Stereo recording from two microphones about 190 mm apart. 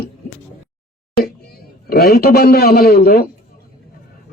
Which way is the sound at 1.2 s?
55° left (ahead or behind).